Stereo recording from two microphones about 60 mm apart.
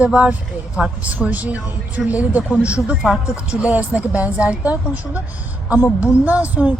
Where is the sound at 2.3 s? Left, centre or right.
Right.